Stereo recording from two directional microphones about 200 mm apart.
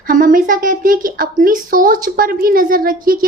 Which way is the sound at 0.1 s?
45° right (ahead or behind).